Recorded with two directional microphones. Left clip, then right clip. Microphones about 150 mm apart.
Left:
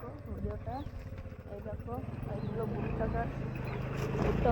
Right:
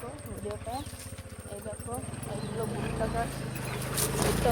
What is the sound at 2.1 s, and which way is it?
Speech, 30° left (ahead or behind).